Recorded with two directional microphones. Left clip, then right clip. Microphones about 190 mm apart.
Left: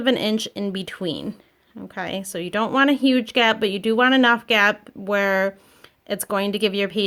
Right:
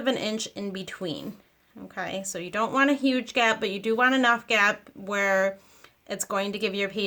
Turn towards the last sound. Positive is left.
turn(degrees=45)  # may be behind; listen again after turning